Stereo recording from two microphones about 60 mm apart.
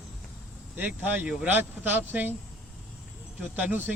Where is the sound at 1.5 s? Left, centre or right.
Right.